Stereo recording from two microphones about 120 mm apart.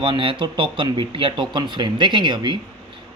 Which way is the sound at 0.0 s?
45° right (ahead or behind).